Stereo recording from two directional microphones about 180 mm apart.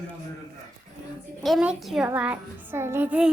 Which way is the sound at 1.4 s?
Centre (ahead or behind).